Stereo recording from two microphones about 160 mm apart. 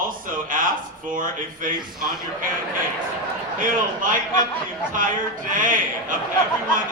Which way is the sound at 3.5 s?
55° right (ahead or behind).